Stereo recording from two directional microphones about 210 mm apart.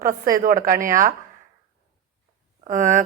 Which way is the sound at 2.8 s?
35° right (ahead or behind).